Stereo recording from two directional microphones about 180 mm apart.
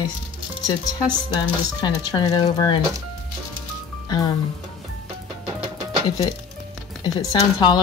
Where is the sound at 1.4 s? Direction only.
25° left (ahead or behind).